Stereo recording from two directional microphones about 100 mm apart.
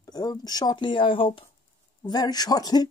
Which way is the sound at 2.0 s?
40° left (ahead or behind).